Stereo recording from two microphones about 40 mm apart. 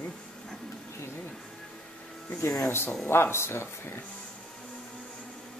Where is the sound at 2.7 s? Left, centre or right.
Left.